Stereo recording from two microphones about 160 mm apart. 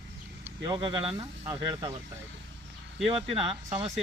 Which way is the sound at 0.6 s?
35° right (ahead or behind).